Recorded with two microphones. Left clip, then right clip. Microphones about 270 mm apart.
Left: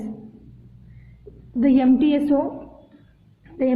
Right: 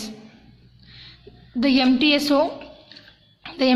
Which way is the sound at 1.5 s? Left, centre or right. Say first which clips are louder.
Left 1 dB; centre.